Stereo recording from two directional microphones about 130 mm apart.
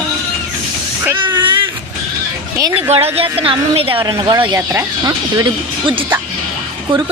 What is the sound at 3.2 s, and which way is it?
A woman's voice, 45° right (ahead or behind).